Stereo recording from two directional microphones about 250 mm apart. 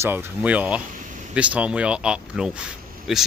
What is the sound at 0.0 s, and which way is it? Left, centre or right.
Speech, centre.